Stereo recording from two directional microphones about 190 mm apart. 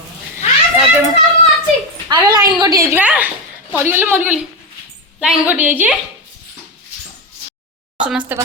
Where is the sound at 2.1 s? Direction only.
25° right (ahead or behind).